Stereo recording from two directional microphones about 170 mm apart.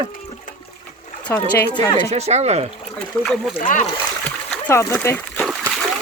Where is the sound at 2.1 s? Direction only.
40° right (ahead or behind).